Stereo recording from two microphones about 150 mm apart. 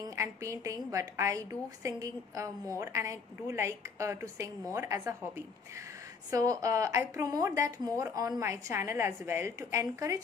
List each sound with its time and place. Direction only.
0.0 s speech: 20° right (ahead or behind)
6.3 s speech: 20° right (ahead or behind)